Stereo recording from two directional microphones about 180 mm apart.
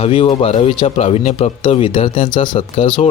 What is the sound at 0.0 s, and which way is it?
Speech, 30° left (ahead or behind).